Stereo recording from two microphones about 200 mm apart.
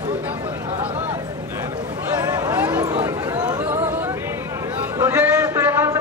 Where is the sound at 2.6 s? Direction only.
5° right (ahead or behind).